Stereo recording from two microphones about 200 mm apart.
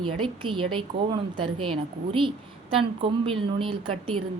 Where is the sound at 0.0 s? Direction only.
25° right (ahead or behind).